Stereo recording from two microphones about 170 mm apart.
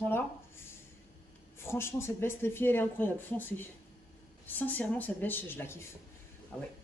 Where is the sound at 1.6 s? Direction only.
15° left (ahead or behind).